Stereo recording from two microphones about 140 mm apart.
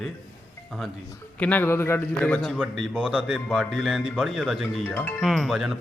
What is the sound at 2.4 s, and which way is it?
A man's voice, 5° right (ahead or behind).